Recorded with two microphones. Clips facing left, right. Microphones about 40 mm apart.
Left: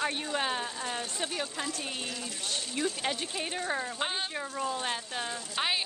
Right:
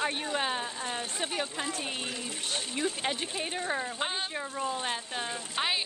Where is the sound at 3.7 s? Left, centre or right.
Centre.